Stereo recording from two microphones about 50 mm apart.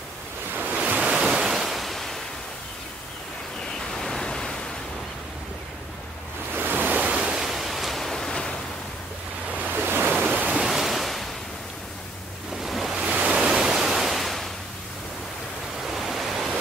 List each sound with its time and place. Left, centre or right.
0.7 s waves: right
1.2 s waves: centre
3.9 s pink noise: centre
6.5 s waves: right
7.0 s waves: right
7.3 s pink noise: centre
9.8 s waves: right
10.3 s ocean: right
10.6 s waves: centre
12.6 s waves: centre
13.0 s waves: centre
15.9 s ocean: centre